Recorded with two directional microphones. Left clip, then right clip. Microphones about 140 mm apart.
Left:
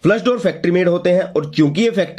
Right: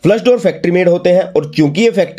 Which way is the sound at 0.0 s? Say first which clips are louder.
Right 5 dB; 30° right (ahead or behind).